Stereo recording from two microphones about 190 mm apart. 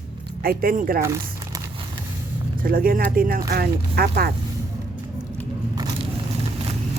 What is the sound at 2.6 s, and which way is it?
Speech, 50° right (ahead or behind).